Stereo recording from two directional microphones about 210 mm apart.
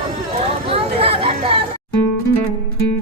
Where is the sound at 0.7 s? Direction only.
25° right (ahead or behind).